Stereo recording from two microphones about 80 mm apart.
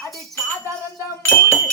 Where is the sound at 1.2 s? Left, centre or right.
Left.